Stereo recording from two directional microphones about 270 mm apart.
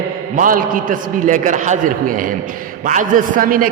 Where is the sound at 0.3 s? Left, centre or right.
Right.